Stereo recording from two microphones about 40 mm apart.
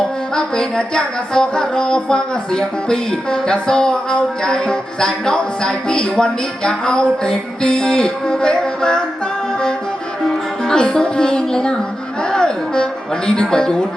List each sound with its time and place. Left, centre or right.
0.3 s music: centre
10.2 s music: centre
12.3 s speech: centre